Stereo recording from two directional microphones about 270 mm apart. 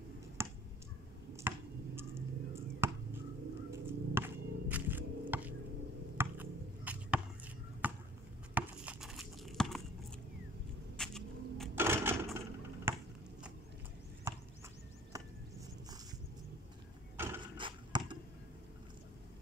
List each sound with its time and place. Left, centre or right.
0.4 s clicking: centre
1.5 s finger snapping: centre
2.0 s a sound: centre
11.0 s sewing machine: centre
14.3 s chop: centre
17.2 s a sound: centre